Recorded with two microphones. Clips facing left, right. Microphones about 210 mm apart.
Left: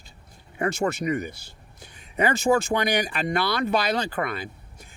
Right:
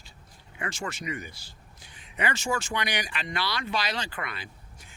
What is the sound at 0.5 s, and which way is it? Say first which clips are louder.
Speech: left 10 dB; 40° left (ahead or behind).